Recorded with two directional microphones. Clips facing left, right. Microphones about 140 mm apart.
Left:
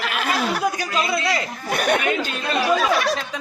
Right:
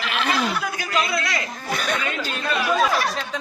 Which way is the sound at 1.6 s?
55° left (ahead or behind).